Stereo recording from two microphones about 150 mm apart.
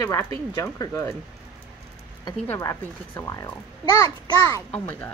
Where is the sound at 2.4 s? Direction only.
25° left (ahead or behind).